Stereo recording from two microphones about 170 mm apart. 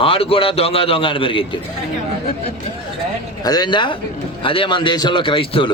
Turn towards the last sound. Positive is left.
turn(degrees=30)  # may be behind; listen again after turning